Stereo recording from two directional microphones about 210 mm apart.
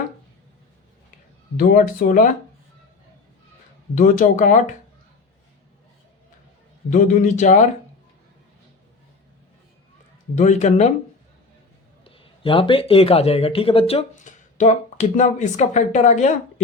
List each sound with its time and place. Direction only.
1.5 s speech: 40° left (ahead or behind)
3.9 s speech: 40° left (ahead or behind)
6.9 s speech: 35° left (ahead or behind)
10.3 s speech: 35° left (ahead or behind)
12.0 s speech: 25° left (ahead or behind)